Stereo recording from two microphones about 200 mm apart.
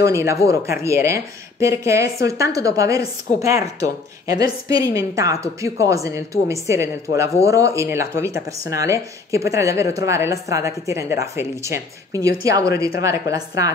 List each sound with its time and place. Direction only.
0.0 s speech: 15° right (ahead or behind)